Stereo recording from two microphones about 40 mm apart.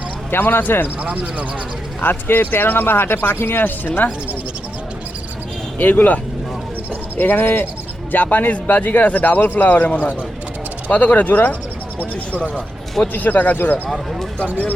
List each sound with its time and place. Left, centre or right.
0.3 s speech: left
2.0 s speech: left
3.6 s a man's voice: left
5.8 s a man's voice: left
7.2 s speech: left
8.1 s a man's voice: left
13.1 s a man's voice: left